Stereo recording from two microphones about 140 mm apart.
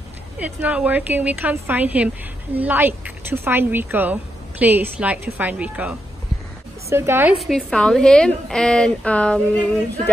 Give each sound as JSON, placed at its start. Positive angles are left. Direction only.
{"t": 0.4, "sound": "speech", "side_deg": -10}
{"t": 7.3, "sound": "a woman's voice", "side_deg": 0}